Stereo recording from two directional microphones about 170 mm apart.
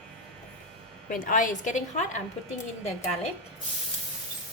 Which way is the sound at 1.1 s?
50° left (ahead or behind).